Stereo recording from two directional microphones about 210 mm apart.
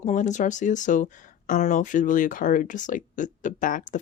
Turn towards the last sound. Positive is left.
turn(degrees=40)  # may be behind; listen again after turning